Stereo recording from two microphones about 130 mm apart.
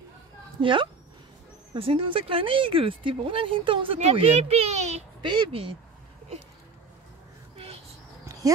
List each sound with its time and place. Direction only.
0.6 s a child's voice: 40° right (ahead or behind); by 5.0 s 60° right (ahead or behind)
5.2 s speech: 40° right (ahead or behind)